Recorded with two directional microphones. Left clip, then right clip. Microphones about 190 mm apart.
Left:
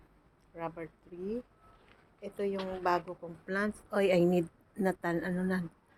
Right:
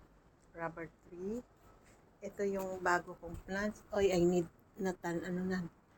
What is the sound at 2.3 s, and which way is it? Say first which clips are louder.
Speech: left 2 dB; 20° left (ahead or behind).